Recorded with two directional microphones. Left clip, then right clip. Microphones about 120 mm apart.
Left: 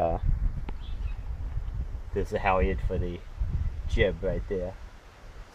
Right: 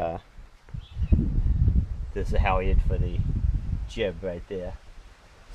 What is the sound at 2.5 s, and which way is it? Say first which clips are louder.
Speech: left 1 dB; centre (ahead or behind).